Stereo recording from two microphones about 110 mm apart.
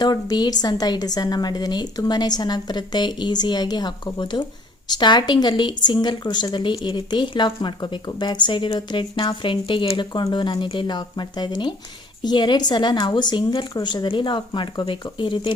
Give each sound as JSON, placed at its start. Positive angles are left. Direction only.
{"t": 0.0, "sound": "a woman's voice", "side_deg": 40}